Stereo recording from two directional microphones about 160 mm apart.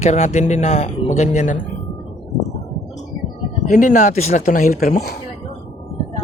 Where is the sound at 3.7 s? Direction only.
50° left (ahead or behind).